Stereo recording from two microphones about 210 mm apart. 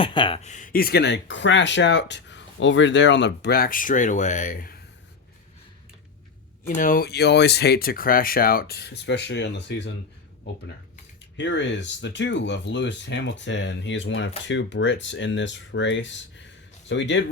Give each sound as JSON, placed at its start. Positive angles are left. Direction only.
{"t": 0.0, "sound": "speech", "side_deg": 25}
{"t": 6.7, "sound": "speech", "side_deg": 40}
{"t": 11.3, "sound": "speech", "side_deg": 60}